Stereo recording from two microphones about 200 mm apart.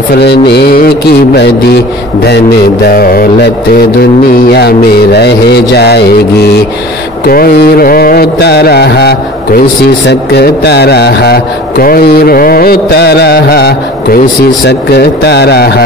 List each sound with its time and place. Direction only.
0.1 s mantra: 55° left (ahead or behind)
2.2 s speech: 55° left (ahead or behind)
4.6 s mantra: 55° left (ahead or behind)
7.2 s speech: 45° left (ahead or behind)
14.7 s mantra: 55° left (ahead or behind)